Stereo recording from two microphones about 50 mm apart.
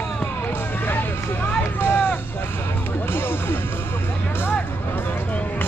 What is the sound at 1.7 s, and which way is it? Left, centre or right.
Music, left.